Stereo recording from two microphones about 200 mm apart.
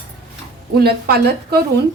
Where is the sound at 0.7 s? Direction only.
50° right (ahead or behind).